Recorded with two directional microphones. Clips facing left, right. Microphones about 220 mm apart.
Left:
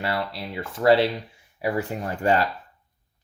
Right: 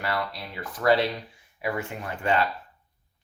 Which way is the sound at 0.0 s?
25° left (ahead or behind).